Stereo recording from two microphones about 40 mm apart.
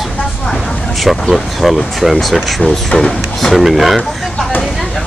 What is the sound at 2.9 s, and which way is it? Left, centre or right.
Speech, left.